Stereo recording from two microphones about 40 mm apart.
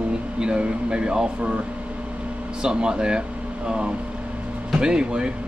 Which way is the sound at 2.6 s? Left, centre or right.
Right.